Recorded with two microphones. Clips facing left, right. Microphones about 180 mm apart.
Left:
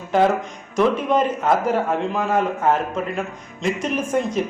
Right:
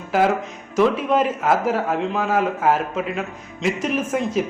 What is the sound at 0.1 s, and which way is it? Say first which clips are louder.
A man's voice: left 1 dB; 5° right (ahead or behind).